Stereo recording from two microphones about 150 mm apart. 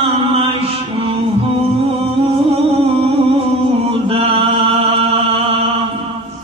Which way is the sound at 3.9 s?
40° right (ahead or behind).